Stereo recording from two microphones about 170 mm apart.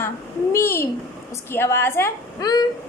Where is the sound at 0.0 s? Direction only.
15° left (ahead or behind).